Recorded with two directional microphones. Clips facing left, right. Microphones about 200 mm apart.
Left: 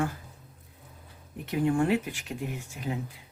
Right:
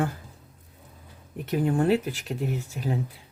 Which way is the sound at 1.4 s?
40° right (ahead or behind).